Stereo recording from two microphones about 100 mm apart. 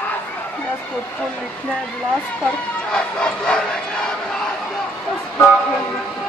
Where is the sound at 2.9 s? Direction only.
10° left (ahead or behind).